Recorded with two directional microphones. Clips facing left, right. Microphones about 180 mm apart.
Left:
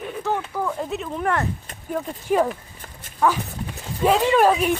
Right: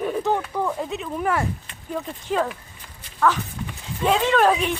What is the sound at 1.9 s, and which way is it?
Speech, 10° left (ahead or behind).